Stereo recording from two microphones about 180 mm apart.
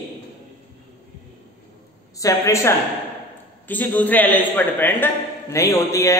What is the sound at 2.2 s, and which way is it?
Speech, 15° left (ahead or behind).